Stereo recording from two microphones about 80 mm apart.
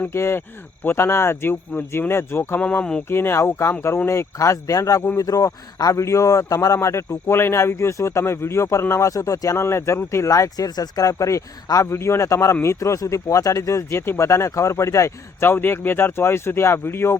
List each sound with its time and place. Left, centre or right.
0.1 s speech: left